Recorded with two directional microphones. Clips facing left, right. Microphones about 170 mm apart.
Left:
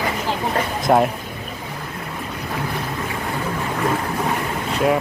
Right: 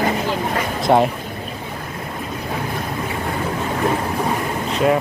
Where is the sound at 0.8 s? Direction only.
Centre (ahead or behind).